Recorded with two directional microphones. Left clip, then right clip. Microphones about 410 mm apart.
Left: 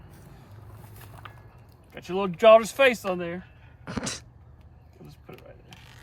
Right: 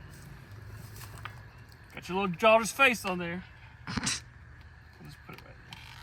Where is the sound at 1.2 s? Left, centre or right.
Centre.